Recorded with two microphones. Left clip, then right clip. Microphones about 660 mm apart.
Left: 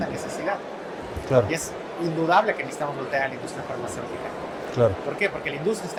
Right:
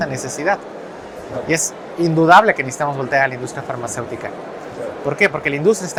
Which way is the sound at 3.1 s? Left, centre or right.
Right.